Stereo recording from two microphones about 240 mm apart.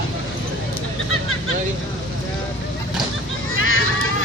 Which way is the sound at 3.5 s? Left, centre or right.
Left.